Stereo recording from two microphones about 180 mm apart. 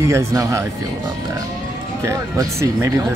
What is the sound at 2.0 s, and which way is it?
Speech, 15° right (ahead or behind).